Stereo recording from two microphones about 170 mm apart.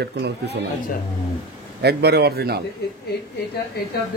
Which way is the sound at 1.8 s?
70° right (ahead or behind).